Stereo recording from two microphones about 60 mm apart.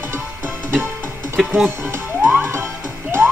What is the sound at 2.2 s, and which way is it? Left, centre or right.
Music, right.